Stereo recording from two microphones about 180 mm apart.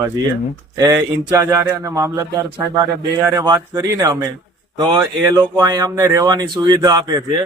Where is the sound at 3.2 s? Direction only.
20° right (ahead or behind).